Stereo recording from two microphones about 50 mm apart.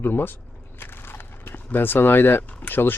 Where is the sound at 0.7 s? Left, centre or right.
Left.